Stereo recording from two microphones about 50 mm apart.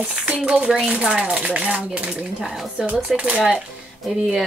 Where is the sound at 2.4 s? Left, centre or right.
Centre.